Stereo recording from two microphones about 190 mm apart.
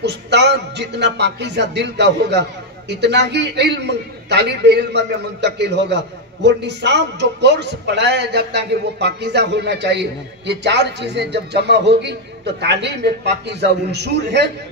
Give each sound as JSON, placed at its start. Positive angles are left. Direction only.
{"t": 0.0, "sound": "a man's voice", "side_deg": -65}